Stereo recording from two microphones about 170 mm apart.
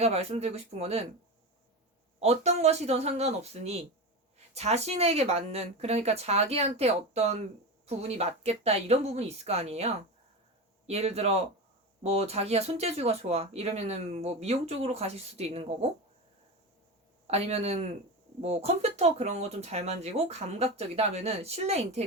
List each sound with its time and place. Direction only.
0.0 s speech: 40° right (ahead or behind)
2.2 s speech: 40° right (ahead or behind)
17.2 s speech: 40° right (ahead or behind)